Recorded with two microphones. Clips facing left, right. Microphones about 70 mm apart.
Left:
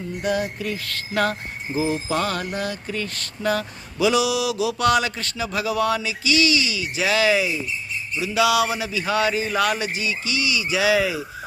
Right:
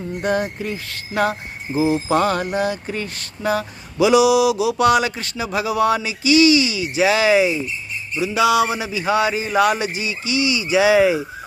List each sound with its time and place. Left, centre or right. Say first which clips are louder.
0.2 s speech: right 3 dB; right
0.9 s speech: right 3 dB; centre
2.0 s speech: right 6 dB; right
3.4 s speech: right 2 dB; centre; by 11.2 s right